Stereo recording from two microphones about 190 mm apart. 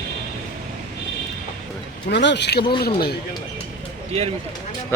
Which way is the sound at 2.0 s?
65° left (ahead or behind).